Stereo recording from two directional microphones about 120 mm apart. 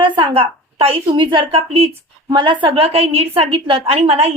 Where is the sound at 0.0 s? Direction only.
50° right (ahead or behind).